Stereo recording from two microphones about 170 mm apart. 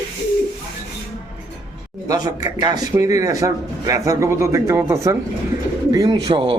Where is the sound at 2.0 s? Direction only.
20° right (ahead or behind).